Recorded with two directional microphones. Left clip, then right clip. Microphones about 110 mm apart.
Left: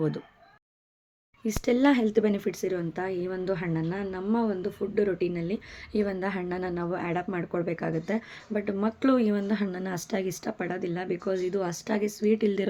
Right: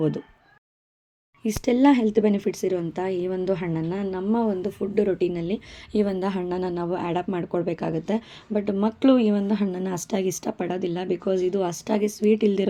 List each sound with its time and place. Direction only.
1.5 s a woman's voice: 25° right (ahead or behind)
4.4 s a woman's voice: 45° right (ahead or behind); by 12.6 s 25° right (ahead or behind)